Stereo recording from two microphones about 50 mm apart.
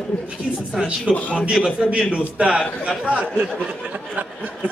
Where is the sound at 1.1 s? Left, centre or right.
Left.